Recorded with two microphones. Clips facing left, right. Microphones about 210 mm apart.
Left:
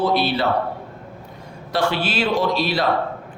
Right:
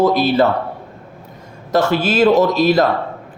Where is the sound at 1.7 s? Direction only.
45° right (ahead or behind).